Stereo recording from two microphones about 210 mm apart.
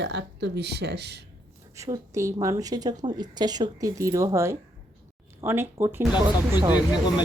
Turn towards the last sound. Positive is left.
turn(degrees=20)  # may be behind; listen again after turning